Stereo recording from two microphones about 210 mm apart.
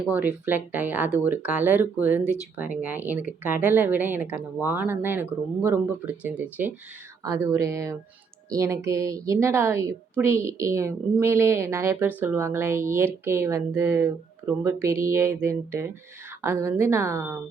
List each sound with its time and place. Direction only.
0.1 s a woman's voice: 10° right (ahead or behind)